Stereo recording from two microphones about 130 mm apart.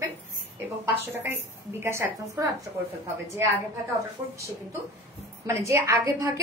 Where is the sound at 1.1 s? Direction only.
20° right (ahead or behind).